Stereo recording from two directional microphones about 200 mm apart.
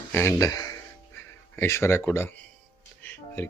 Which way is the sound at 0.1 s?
10° left (ahead or behind).